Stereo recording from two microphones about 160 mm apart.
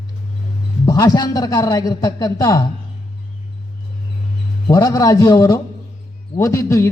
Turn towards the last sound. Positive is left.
turn(degrees=20)  # may be behind; listen again after turning